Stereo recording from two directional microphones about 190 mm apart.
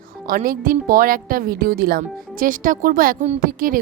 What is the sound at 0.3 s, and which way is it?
A woman's voice, 50° right (ahead or behind).